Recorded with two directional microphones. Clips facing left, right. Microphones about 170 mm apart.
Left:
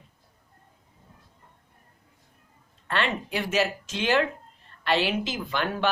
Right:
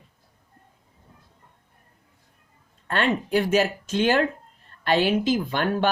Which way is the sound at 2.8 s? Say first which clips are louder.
Right 4 dB; 45° right (ahead or behind).